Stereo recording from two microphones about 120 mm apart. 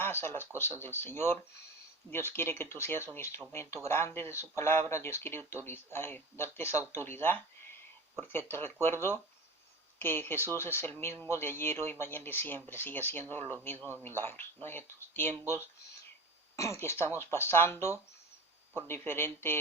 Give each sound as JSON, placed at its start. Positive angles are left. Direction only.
{"t": 0.0, "sound": "speech", "side_deg": 20}